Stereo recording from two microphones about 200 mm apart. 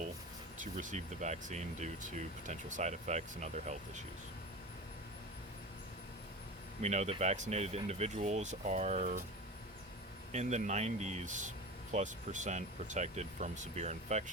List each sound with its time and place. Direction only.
0.6 s speech: 40° right (ahead or behind)
6.8 s speech: 35° right (ahead or behind)
10.3 s speech: 35° right (ahead or behind)